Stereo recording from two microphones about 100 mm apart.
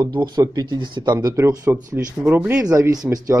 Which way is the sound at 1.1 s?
35° right (ahead or behind).